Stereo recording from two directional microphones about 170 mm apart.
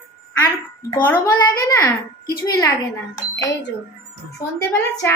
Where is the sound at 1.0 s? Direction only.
15° left (ahead or behind).